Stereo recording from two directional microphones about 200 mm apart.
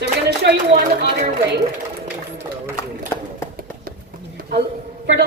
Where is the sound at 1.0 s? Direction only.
55° right (ahead or behind).